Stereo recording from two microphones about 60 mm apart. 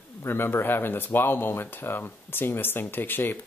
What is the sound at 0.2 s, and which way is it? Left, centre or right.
Speech, left.